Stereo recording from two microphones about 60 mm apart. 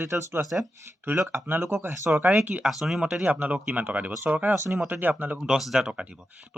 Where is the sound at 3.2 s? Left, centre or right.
Right.